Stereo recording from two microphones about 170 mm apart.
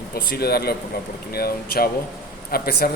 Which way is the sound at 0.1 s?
65° left (ahead or behind).